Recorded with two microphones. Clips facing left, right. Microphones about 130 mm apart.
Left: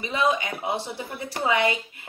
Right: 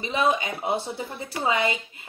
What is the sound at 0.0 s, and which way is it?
A woman's voice, 25° right (ahead or behind).